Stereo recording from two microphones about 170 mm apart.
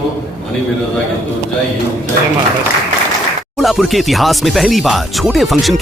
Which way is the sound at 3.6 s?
Centre (ahead or behind).